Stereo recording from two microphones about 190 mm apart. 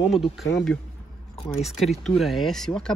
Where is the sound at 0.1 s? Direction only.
Centre (ahead or behind).